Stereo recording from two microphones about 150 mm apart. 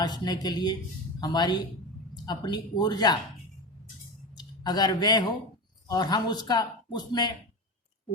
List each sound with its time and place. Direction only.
0.0 s speech: 30° left (ahead or behind)
4.4 s a man's voice: 25° left (ahead or behind)